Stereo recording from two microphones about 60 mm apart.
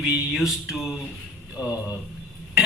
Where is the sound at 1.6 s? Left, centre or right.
Left.